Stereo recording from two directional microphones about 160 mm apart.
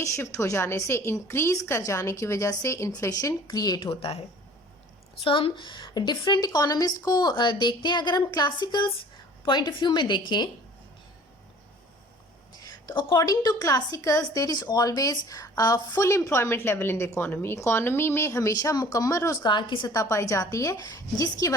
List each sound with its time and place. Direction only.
0.0 s a woman's voice: 20° left (ahead or behind); by 4.2 s 35° left (ahead or behind)
5.2 s a woman's voice: 35° left (ahead or behind)
13.0 s a woman's voice: 30° left (ahead or behind)